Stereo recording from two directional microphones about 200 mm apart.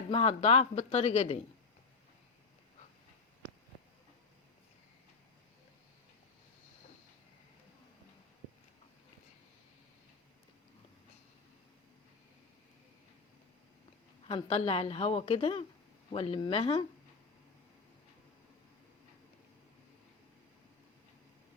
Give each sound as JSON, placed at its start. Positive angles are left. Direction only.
{"t": 0.1, "sound": "speech", "side_deg": 30}
{"t": 14.3, "sound": "a woman's voice", "side_deg": 25}